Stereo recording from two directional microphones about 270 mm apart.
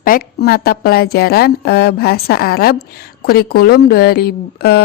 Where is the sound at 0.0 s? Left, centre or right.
Left.